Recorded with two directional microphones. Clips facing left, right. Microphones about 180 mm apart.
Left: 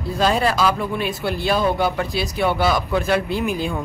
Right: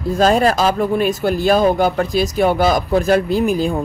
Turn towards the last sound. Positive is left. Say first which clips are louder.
# right 6 dB
turn(degrees=-40)  # may be behind; listen again after turning